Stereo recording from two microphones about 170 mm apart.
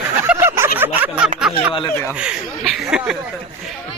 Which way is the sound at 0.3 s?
15° right (ahead or behind).